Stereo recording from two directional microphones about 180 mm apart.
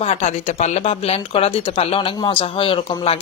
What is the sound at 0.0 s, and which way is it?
Speech, 40° left (ahead or behind).